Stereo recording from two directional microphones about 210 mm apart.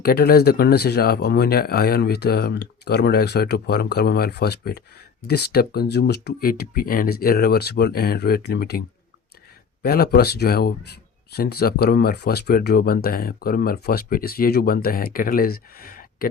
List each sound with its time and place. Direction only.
0.0 s speech: 45° left (ahead or behind)
9.8 s speech: 45° left (ahead or behind)